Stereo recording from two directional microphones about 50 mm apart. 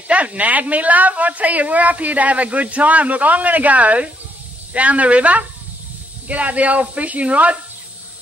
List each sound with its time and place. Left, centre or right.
0.1 s a woman's voice: right